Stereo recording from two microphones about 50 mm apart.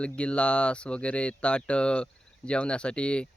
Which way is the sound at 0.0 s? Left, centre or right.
Left.